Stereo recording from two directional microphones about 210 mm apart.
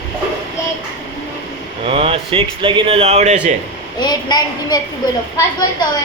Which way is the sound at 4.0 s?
20° left (ahead or behind).